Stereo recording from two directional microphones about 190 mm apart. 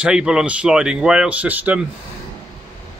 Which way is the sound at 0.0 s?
5° right (ahead or behind).